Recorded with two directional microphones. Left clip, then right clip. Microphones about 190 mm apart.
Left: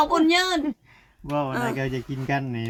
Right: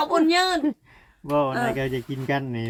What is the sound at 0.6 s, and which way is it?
Speech, 10° right (ahead or behind).